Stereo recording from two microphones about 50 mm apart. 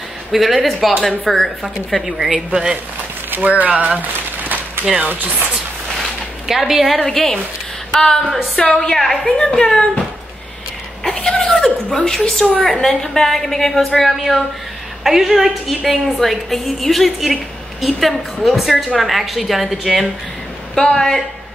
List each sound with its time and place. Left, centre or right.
0.3 s a woman's voice: centre
1.2 s a woman's voice: centre
2.3 s speech: centre
3.3 s speech: right
5.0 s speech: right
5.9 s a sound: centre
7.0 s a woman's voice: centre
9.5 s speech: centre
11.1 s a woman's voice: centre
20.7 s a woman's voice: centre